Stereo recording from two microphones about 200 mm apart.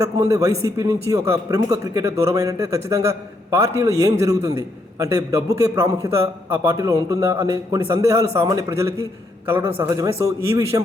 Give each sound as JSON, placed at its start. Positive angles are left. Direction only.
{"t": 0.0, "sound": "a man's voice", "side_deg": -15}